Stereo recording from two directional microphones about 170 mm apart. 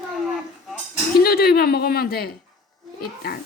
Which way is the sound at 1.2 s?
65° left (ahead or behind).